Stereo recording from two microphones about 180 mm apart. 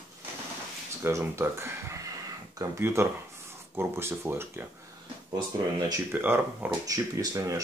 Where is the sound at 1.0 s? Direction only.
15° right (ahead or behind).